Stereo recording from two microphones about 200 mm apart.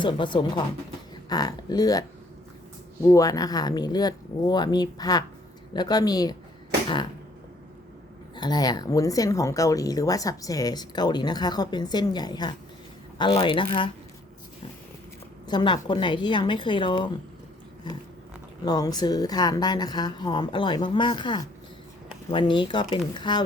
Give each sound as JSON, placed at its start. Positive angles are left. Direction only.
{"t": 0.0, "sound": "speech", "side_deg": 25}
{"t": 8.4, "sound": "speech", "side_deg": 20}
{"t": 15.4, "sound": "speech", "side_deg": 25}
{"t": 18.6, "sound": "speech", "side_deg": 20}